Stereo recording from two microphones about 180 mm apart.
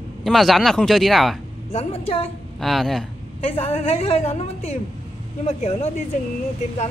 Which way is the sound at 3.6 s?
35° left (ahead or behind).